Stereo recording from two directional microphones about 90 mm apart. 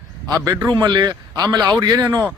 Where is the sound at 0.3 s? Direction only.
45° right (ahead or behind).